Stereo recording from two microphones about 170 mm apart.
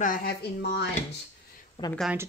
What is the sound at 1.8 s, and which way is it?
Speech, 30° left (ahead or behind).